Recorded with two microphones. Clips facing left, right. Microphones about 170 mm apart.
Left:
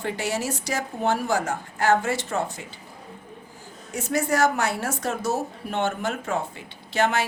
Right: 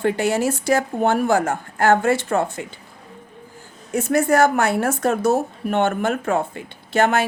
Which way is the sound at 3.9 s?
55° right (ahead or behind).